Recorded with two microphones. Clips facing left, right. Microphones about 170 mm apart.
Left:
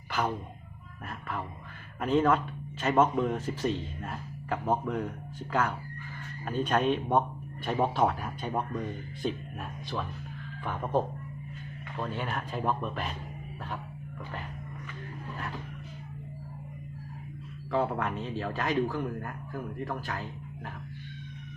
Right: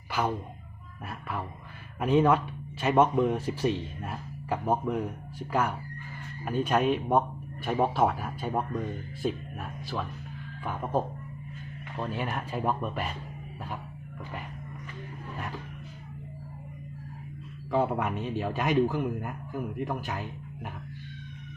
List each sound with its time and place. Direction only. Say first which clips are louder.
1.0 s speech: right 1 dB; 5° right (ahead or behind)
17.7 s speech: right 2 dB; 15° right (ahead or behind)